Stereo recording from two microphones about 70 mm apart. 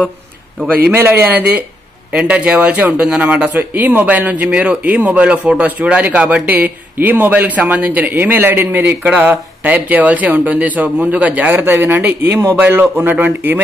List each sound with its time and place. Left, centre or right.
0.9 s a man's voice: right